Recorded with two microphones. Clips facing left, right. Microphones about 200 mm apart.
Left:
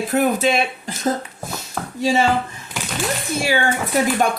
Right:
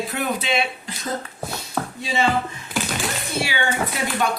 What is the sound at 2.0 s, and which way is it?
Speech, 45° left (ahead or behind).